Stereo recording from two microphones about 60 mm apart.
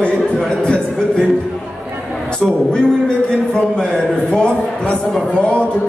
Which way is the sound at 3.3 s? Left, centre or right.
Centre.